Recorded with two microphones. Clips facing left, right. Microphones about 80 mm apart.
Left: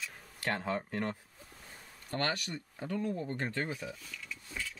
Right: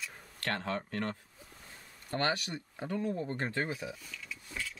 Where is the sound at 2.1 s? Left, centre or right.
Centre.